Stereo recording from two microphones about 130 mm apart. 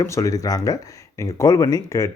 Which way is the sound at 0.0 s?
25° left (ahead or behind).